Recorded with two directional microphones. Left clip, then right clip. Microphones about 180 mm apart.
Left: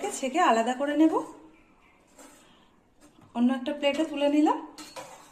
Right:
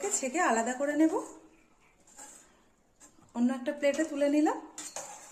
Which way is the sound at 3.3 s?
35° right (ahead or behind).